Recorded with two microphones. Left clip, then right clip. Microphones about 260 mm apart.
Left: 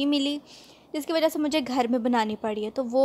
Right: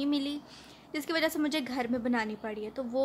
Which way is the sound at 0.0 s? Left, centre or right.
Left.